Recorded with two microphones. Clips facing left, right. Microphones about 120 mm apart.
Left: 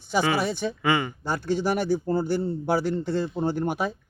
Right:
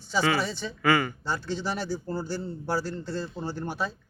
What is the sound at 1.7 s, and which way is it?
Speech, 55° left (ahead or behind).